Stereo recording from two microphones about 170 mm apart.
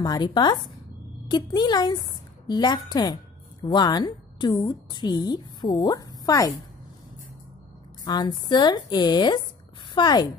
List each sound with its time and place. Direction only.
0.0 s a woman's voice: 25° left (ahead or behind)
8.0 s a woman's voice: 25° left (ahead or behind)